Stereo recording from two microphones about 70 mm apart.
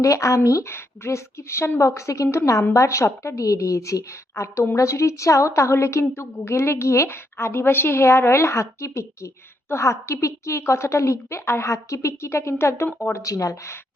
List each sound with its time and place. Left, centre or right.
0.0 s a woman's voice: left
0.7 s a woman's voice: left
13.1 s a woman's voice: left